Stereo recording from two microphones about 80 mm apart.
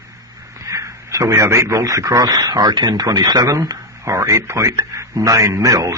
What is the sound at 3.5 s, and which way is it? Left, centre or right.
Speech, right.